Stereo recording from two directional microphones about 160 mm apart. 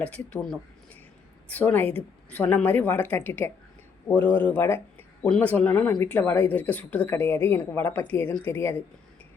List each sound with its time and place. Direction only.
0.0 s speech: 5° left (ahead or behind)